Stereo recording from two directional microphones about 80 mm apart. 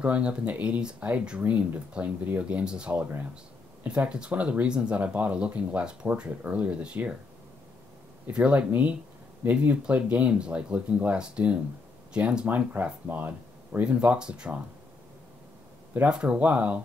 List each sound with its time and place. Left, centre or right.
0.0 s speech: centre
8.3 s speech: centre
16.1 s speech: centre